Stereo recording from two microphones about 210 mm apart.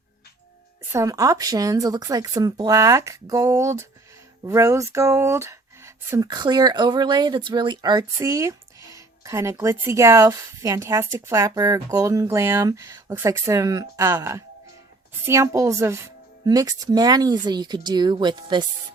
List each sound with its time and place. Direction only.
0.9 s speech: 15° right (ahead or behind)